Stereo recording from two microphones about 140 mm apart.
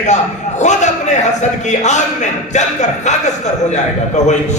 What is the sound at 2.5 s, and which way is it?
A man's voice, 55° left (ahead or behind).